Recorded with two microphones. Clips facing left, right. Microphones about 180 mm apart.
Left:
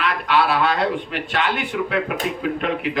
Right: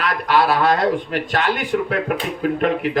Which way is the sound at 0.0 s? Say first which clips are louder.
Right 2 dB; 40° right (ahead or behind).